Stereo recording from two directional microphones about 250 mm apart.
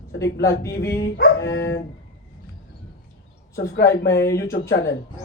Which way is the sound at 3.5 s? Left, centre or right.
Left.